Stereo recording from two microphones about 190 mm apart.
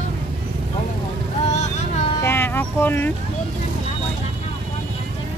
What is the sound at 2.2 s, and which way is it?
Music, 10° left (ahead or behind).